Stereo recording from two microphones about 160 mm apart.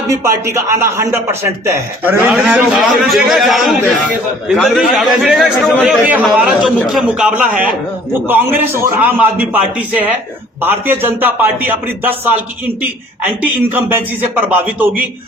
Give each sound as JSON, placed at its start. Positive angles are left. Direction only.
{"t": 0.1, "sound": "a man's voice", "side_deg": -15}
{"t": 2.3, "sound": "a man's voice", "side_deg": 0}
{"t": 13.4, "sound": "a man's voice", "side_deg": -10}